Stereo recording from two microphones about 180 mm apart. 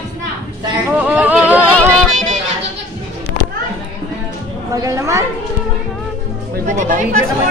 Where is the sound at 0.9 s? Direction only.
5° right (ahead or behind).